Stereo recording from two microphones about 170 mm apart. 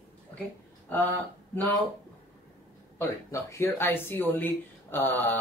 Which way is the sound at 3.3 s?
15° left (ahead or behind).